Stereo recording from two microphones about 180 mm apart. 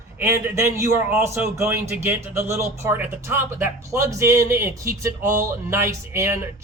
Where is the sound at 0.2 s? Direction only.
15° right (ahead or behind).